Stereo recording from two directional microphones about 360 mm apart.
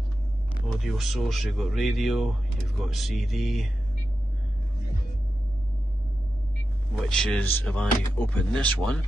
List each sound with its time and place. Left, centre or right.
0.7 s speech: centre
7.1 s speech: centre